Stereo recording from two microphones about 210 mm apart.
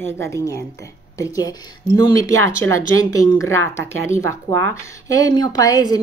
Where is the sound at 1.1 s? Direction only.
15° left (ahead or behind).